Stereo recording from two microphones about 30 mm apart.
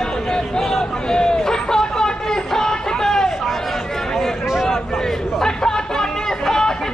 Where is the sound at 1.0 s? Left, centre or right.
Left.